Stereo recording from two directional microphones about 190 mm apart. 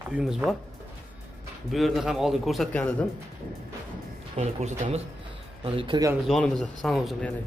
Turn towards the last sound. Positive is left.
turn(degrees=0)  # may be behind; listen again after turning